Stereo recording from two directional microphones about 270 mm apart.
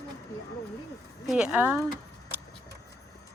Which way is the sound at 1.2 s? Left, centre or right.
Centre.